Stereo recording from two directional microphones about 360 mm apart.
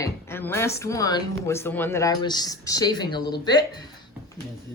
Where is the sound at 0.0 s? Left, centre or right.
Centre.